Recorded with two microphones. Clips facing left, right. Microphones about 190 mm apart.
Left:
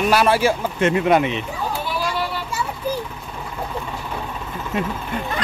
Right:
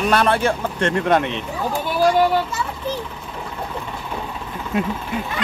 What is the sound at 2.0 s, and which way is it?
Children playing, 50° right (ahead or behind).